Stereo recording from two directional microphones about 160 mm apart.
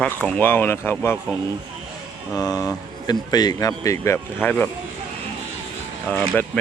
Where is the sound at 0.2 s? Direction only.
10° left (ahead or behind).